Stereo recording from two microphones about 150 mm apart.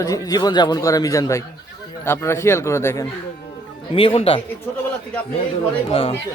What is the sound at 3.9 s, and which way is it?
Speech, 40° left (ahead or behind).